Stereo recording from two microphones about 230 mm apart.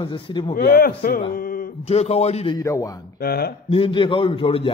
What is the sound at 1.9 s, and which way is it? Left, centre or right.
Speech, left.